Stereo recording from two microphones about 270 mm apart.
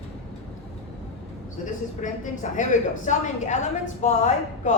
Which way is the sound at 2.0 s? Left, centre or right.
Left.